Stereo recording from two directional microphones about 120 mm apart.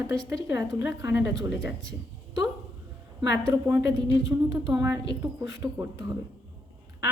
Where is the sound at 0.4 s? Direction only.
30° right (ahead or behind).